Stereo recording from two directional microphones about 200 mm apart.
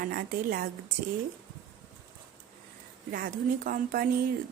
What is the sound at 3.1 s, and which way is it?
Speech, 45° right (ahead or behind).